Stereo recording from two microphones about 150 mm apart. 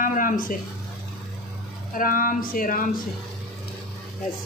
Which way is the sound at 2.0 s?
65° left (ahead or behind).